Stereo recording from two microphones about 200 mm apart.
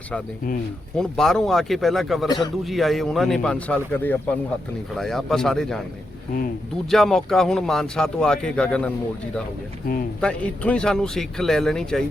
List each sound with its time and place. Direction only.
0.9 s speech: centre (ahead or behind)
2.2 s speech: 20° left (ahead or behind)
2.6 s speech: centre (ahead or behind)
6.9 s speech: centre (ahead or behind)
10.2 s speech: 5° left (ahead or behind)